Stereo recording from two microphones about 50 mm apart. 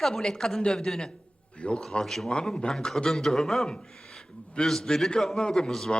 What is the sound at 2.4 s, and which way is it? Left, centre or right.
Speech, centre.